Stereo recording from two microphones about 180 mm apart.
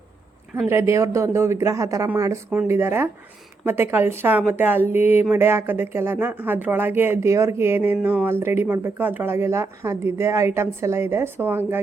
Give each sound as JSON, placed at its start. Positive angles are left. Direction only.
{"t": 0.6, "sound": "speech", "side_deg": -15}